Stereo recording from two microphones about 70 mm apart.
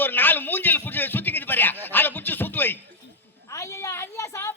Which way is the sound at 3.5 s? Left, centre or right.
Left.